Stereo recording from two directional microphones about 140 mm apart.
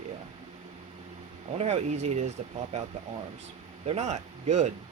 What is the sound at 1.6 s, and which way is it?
Speech, 55° right (ahead or behind).